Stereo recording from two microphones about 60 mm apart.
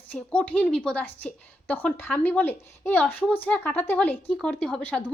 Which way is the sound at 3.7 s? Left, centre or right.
Left.